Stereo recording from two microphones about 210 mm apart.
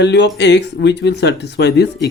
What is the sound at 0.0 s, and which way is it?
Speech, 55° left (ahead or behind).